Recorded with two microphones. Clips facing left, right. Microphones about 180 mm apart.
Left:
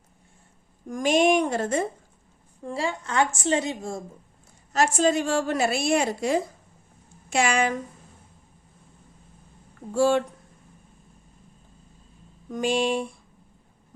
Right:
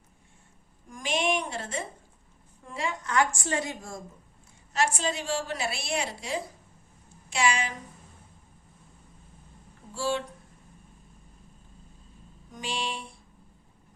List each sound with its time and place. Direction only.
0.9 s a woman's voice: 45° left (ahead or behind)
2.6 s a woman's voice: 30° left (ahead or behind)
4.7 s a woman's voice: 45° left (ahead or behind)
9.9 s a woman's voice: 50° left (ahead or behind)
12.5 s a woman's voice: 50° left (ahead or behind)